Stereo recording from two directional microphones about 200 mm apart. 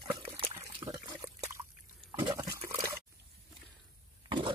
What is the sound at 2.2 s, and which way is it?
Liquid, 20° right (ahead or behind).